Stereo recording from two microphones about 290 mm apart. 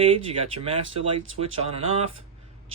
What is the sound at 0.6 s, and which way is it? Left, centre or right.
Speech, centre.